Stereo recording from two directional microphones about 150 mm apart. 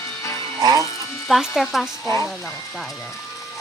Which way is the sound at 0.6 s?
25° right (ahead or behind).